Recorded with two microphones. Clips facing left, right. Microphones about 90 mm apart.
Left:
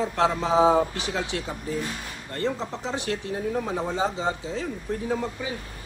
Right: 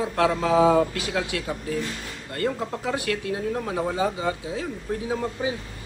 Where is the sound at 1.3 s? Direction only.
55° right (ahead or behind).